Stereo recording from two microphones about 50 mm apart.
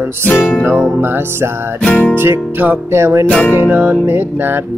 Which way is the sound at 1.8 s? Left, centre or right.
Left.